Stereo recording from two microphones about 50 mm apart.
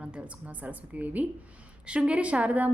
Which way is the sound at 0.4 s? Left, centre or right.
Right.